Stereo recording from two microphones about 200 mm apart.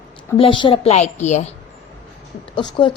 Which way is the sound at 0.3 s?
25° left (ahead or behind).